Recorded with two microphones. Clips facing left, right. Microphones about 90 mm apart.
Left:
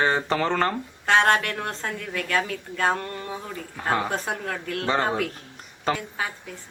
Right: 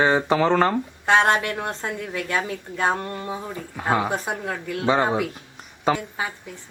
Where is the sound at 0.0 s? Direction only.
15° right (ahead or behind).